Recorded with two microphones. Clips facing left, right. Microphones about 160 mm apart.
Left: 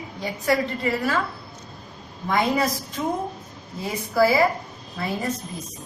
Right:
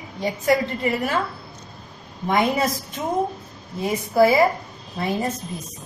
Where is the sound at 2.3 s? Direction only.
20° right (ahead or behind).